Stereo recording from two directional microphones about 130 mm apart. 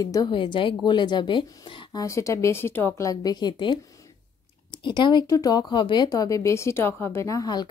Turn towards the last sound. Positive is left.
turn(degrees=30)  # may be behind; listen again after turning